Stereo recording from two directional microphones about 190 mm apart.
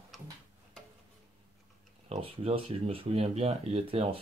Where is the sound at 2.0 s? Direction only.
30° right (ahead or behind).